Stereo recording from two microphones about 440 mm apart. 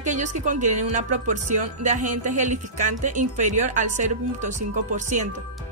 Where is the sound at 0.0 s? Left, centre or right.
Centre.